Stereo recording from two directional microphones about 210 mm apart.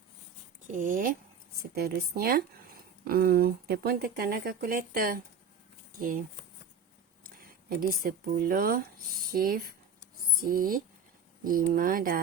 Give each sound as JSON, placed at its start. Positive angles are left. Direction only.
{"t": 0.7, "sound": "speech", "side_deg": -40}
{"t": 7.3, "sound": "speech", "side_deg": -45}